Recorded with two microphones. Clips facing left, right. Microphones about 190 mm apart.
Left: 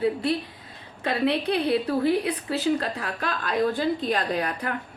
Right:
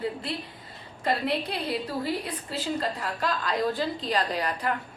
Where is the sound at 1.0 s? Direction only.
65° left (ahead or behind).